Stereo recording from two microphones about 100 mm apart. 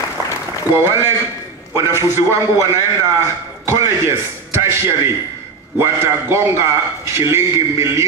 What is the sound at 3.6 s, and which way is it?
A man's voice, 30° right (ahead or behind).